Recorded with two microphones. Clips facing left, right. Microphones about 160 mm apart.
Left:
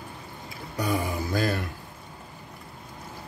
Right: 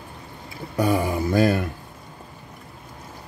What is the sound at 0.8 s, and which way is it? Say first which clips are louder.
Mantra: right 6 dB; 45° right (ahead or behind).